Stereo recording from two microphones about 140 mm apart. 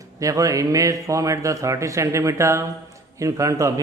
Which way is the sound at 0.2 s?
25° right (ahead or behind).